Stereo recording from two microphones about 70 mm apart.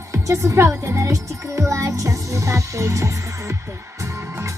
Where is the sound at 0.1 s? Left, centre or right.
Right.